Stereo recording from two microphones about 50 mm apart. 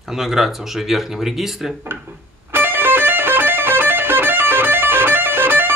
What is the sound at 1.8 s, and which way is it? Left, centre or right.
Music, right.